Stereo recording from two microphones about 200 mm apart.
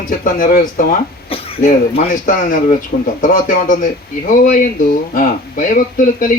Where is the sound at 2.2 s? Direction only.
40° left (ahead or behind).